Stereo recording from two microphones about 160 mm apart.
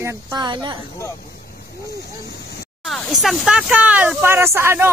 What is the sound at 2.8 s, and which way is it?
Speech, centre (ahead or behind).